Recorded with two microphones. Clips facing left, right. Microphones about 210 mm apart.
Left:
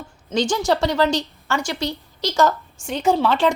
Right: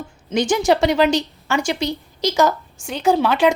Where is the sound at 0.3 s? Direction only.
15° right (ahead or behind).